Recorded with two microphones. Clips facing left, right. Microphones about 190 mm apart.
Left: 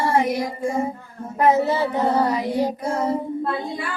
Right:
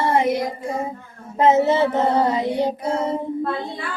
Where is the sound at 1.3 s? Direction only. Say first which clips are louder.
Right 2 dB; 20° right (ahead or behind).